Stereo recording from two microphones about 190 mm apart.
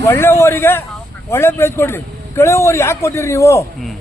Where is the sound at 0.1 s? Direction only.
15° left (ahead or behind).